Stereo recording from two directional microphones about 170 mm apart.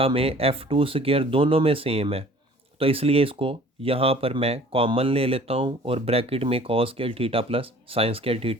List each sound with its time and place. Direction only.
0.0 s speech: 35° right (ahead or behind)